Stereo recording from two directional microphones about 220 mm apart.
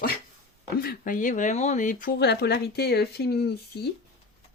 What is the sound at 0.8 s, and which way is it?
Speech, 40° left (ahead or behind).